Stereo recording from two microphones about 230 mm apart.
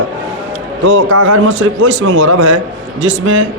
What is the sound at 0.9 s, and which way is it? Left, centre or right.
A man's voice, right.